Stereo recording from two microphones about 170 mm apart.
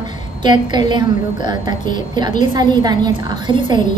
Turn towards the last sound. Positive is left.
turn(degrees=-25)  # may be behind; listen again after turning